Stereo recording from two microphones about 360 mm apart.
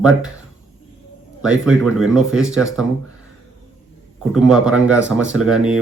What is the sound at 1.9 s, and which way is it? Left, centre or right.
Speech, centre.